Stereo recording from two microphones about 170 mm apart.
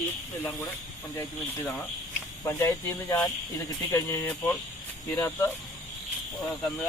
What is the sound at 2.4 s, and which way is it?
Speech, 20° left (ahead or behind).